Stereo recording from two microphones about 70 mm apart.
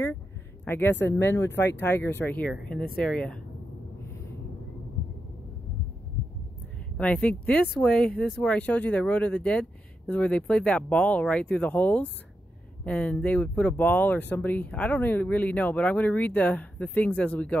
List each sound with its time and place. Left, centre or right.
0.7 s speech: left
2.7 s speech: centre
7.0 s speech: centre
8.4 s speech: centre